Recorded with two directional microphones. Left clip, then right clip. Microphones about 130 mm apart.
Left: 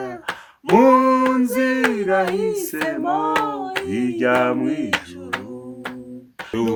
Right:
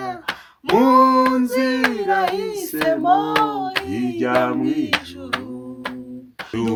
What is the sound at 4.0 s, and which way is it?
Music, 65° left (ahead or behind).